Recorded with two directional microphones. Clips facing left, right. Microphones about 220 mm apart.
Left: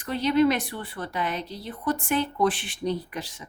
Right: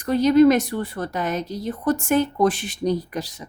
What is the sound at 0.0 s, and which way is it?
A woman's voice, 40° right (ahead or behind).